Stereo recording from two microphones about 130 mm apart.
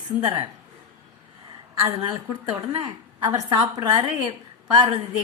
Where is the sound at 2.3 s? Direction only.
45° right (ahead or behind).